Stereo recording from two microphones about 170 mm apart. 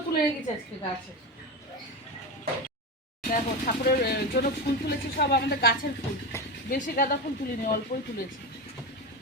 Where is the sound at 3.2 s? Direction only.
55° left (ahead or behind).